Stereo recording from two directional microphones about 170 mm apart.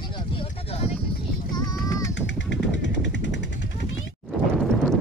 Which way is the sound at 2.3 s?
90° left.